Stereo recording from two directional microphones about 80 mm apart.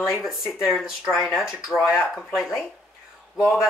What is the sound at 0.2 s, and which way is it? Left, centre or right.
Speech, centre.